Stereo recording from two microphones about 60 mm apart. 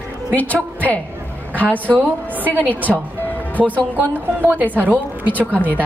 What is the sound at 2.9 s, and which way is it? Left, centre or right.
Speech, centre.